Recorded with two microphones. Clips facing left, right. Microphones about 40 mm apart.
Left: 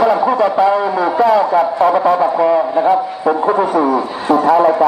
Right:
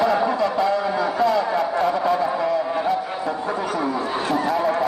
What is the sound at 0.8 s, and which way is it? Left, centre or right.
A man's voice, centre.